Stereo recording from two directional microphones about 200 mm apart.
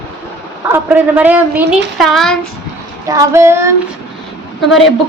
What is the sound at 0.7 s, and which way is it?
A woman's voice, 10° right (ahead or behind).